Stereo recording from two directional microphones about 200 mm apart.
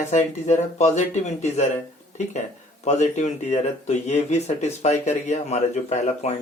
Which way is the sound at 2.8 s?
35° left (ahead or behind).